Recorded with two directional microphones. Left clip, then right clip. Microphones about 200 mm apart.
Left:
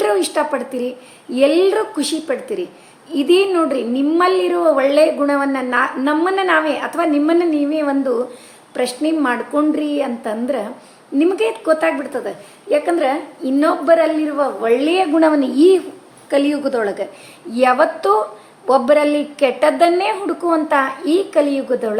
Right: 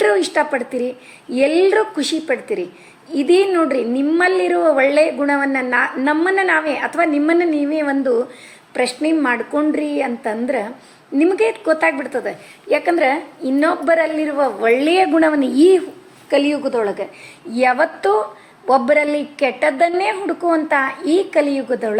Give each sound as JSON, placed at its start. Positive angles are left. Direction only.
{"t": 0.0, "sound": "a woman's voice", "side_deg": -5}
{"t": 13.4, "sound": "a woman's voice", "side_deg": -5}
{"t": 16.5, "sound": "a woman's voice", "side_deg": 0}